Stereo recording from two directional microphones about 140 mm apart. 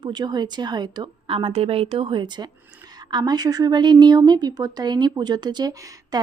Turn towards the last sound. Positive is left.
turn(degrees=-30)  # may be behind; listen again after turning